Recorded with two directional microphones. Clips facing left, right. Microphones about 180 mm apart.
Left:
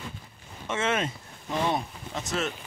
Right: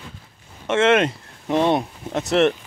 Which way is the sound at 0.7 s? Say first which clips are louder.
Right 11 dB; 75° right (ahead or behind).